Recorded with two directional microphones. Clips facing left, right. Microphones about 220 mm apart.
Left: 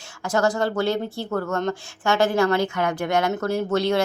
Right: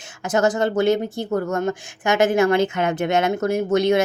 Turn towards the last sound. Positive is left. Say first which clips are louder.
# right 3 dB
turn(degrees=-20)  # may be behind; listen again after turning